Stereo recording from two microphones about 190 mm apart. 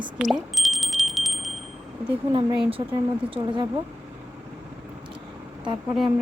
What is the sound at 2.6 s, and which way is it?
A woman's voice, 30° right (ahead or behind).